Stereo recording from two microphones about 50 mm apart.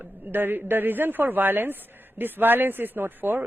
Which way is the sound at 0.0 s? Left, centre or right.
Right.